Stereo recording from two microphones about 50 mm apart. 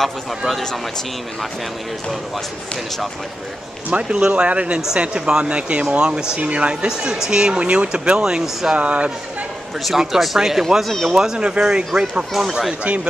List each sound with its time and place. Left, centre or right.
0.5 s speech: centre
3.9 s speech: right
8.7 s speech: right
9.8 s speech: centre
11.1 s speech: centre
12.3 s speech: centre